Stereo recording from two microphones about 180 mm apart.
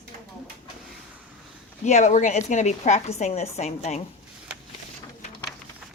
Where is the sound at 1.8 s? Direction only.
40° left (ahead or behind).